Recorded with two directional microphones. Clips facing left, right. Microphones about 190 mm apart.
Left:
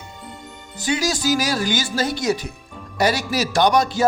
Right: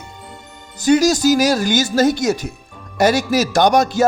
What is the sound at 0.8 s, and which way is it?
Speech, 45° right (ahead or behind).